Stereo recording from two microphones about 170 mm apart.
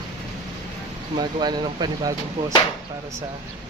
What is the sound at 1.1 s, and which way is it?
Speech, 25° right (ahead or behind).